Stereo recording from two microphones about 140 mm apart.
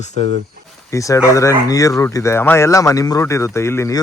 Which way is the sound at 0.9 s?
20° left (ahead or behind).